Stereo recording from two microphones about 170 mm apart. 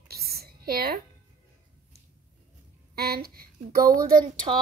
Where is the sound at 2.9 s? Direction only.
65° right (ahead or behind).